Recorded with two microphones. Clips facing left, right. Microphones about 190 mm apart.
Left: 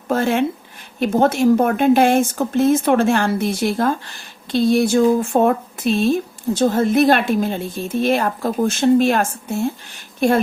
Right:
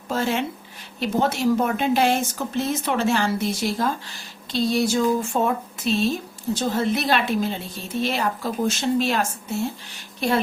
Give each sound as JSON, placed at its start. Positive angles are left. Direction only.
{"t": 0.1, "sound": "a woman's voice", "side_deg": 55}